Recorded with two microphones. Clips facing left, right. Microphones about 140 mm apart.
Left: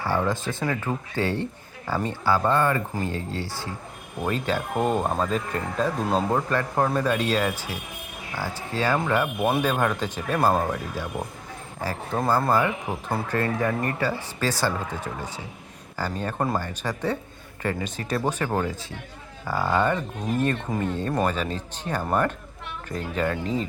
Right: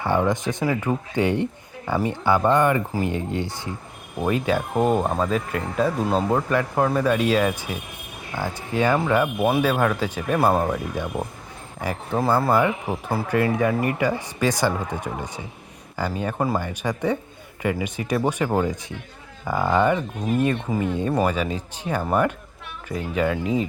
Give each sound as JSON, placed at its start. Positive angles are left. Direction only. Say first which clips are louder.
{"t": 0.0, "sound": "speech", "louder": "right 4 dB", "side_deg": -20}
{"t": 6.5, "sound": "speech", "louder": "right 2 dB", "side_deg": -10}
{"t": 11.0, "sound": "speech", "louder": "right 4 dB", "side_deg": -20}
{"t": 12.1, "sound": "speech", "louder": "right 2 dB", "side_deg": -5}